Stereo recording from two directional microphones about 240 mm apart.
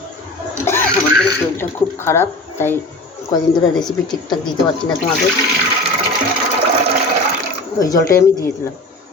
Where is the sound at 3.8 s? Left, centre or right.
Centre.